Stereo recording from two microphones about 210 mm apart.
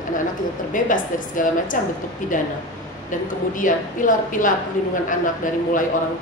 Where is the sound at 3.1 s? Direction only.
40° left (ahead or behind).